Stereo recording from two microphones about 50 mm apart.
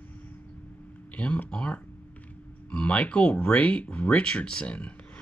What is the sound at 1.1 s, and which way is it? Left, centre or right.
Speech, left.